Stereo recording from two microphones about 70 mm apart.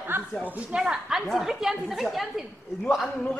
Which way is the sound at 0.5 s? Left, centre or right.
Centre.